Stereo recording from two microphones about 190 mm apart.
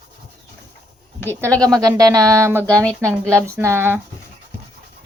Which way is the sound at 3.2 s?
15° right (ahead or behind).